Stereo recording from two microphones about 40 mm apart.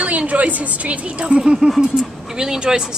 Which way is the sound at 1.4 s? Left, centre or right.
Centre.